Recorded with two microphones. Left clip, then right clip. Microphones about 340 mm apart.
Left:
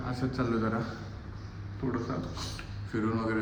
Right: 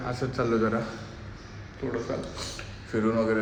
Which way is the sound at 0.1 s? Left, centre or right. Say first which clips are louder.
Right 5 dB; centre.